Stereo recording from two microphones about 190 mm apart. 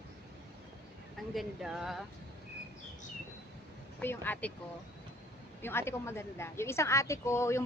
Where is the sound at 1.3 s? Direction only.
Centre (ahead or behind).